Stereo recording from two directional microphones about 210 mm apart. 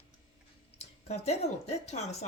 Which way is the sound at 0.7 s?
30° left (ahead or behind).